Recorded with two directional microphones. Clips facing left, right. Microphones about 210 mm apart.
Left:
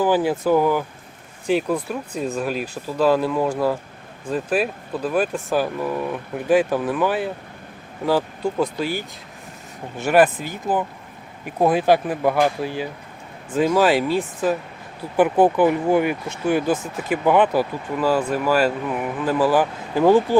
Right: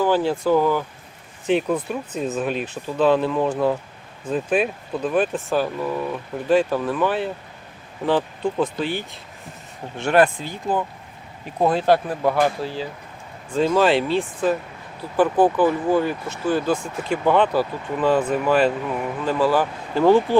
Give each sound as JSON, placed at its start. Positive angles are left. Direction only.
{"t": 0.0, "sound": "speech", "side_deg": 15}
{"t": 15.1, "sound": "speech", "side_deg": 20}